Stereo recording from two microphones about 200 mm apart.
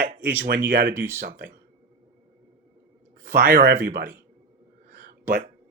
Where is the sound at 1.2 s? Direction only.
50° right (ahead or behind).